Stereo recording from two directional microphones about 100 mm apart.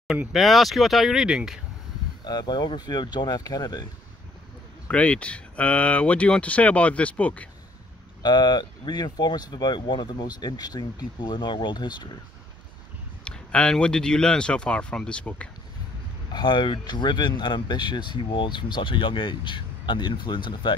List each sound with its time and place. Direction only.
0.3 s speech: centre (ahead or behind)
2.2 s speech: 45° left (ahead or behind)
4.8 s speech: 10° left (ahead or behind)
8.2 s speech: 45° left (ahead or behind)
13.2 s speech: 10° left (ahead or behind)
16.3 s speech: 45° left (ahead or behind)